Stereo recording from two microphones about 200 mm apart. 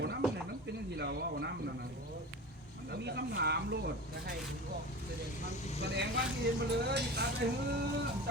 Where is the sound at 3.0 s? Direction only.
55° right (ahead or behind).